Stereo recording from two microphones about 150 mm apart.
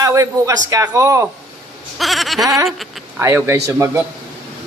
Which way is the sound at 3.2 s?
20° right (ahead or behind).